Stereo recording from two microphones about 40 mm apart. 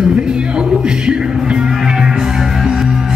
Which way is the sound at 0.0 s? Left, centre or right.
Right.